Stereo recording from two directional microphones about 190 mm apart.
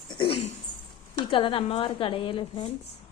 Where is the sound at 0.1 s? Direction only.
30° left (ahead or behind).